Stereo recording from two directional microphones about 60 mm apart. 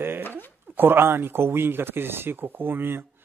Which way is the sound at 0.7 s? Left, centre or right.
Right.